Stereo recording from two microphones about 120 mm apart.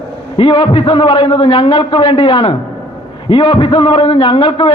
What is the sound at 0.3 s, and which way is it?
A man's voice, 45° left (ahead or behind).